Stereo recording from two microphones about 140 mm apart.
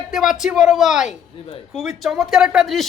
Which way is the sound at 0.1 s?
5° right (ahead or behind).